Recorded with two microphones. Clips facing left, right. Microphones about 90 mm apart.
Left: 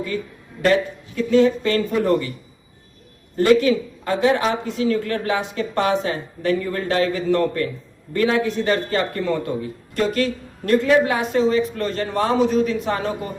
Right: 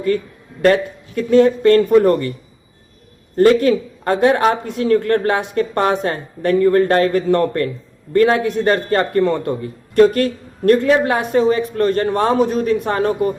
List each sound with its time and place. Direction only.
0.6 s a man's voice: 50° right (ahead or behind)
3.3 s a man's voice: 50° right (ahead or behind)